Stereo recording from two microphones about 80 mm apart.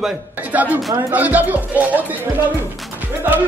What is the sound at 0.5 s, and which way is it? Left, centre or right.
Speech, centre.